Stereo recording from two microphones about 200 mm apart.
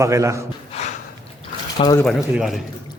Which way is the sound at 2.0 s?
Centre (ahead or behind).